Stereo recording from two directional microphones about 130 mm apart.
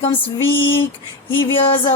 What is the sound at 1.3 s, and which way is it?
Speech, 40° left (ahead or behind).